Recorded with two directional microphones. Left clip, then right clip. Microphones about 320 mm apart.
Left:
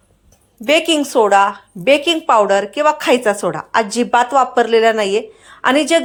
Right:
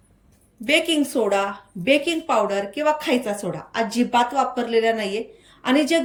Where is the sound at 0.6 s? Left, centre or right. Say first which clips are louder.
Left 6 dB; centre.